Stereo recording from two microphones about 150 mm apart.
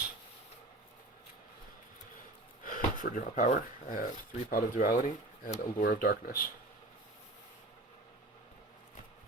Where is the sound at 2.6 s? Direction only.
70° left (ahead or behind).